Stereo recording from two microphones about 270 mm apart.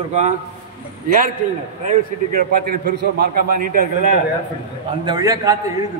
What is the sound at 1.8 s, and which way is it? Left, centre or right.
A man's voice, right.